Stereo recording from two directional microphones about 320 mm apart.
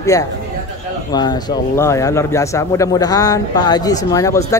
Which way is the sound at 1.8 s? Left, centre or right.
Centre.